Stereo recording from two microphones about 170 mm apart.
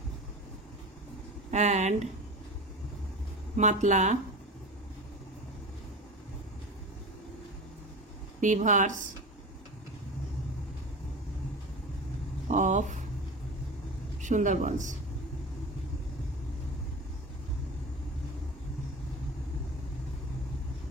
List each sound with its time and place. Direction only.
1.5 s speech: 40° right (ahead or behind)
3.5 s speech: 45° right (ahead or behind)
8.4 s speech: 45° right (ahead or behind)
12.4 s a sound: 45° right (ahead or behind)
14.2 s speech: 45° right (ahead or behind)